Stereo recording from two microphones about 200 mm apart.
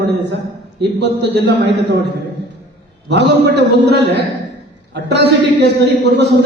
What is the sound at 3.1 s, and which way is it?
Speech, 55° right (ahead or behind).